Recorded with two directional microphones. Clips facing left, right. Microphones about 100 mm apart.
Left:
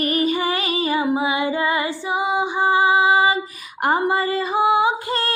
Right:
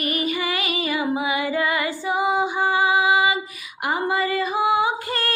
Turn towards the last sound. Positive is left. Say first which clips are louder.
# left 3 dB
turn(degrees=25)  # may be behind; listen again after turning